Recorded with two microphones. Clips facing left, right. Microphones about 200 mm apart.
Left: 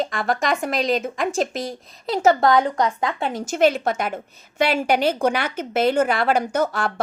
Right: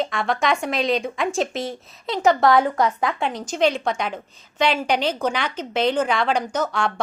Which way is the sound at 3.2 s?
45° left (ahead or behind).